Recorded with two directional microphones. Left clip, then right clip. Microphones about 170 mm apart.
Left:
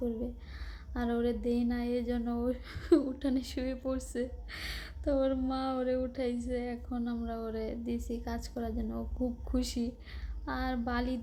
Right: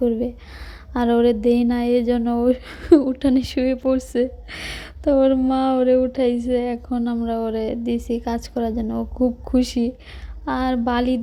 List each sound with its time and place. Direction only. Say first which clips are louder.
0.9 s speech: right 15 dB; 40° right (ahead or behind)